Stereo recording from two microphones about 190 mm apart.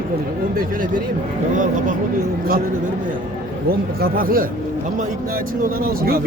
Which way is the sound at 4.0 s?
50° right (ahead or behind).